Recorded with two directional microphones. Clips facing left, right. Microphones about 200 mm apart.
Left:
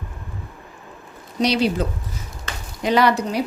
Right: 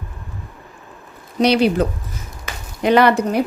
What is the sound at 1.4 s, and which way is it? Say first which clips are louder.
Speech: right 5 dB; 60° right (ahead or behind).